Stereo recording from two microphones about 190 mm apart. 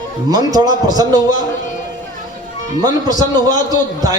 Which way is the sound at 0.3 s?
20° right (ahead or behind).